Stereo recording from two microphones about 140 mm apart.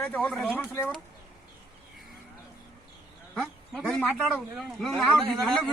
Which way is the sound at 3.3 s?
5° left (ahead or behind).